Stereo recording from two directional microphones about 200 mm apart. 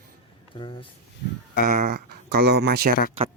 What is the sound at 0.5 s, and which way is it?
Speech, 25° left (ahead or behind).